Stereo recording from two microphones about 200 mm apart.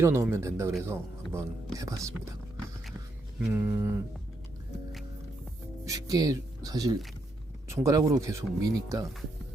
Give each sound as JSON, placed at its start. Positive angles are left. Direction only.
{"t": 0.0, "sound": "speech", "side_deg": -15}
{"t": 3.5, "sound": "speech", "side_deg": -10}
{"t": 5.8, "sound": "speech", "side_deg": -15}